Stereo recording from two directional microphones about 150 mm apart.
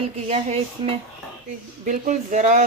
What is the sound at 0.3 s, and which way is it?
Speech, 45° right (ahead or behind).